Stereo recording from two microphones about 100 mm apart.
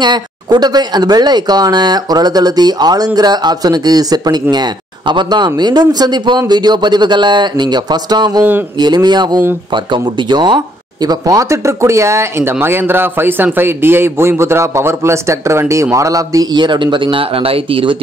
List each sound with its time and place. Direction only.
0.0 s speech: 45° right (ahead or behind)
8.4 s speech: 20° right (ahead or behind)
8.7 s speech: 45° right (ahead or behind); by 17.9 s 65° right (ahead or behind)